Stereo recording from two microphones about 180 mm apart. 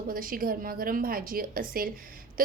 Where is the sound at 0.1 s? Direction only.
50° right (ahead or behind).